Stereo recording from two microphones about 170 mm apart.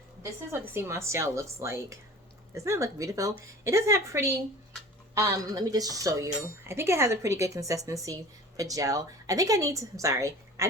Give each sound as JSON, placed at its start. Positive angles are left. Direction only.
{"t": 0.5, "sound": "a woman's voice", "side_deg": -15}